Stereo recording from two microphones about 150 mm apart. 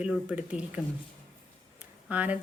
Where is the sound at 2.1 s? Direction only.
10° right (ahead or behind).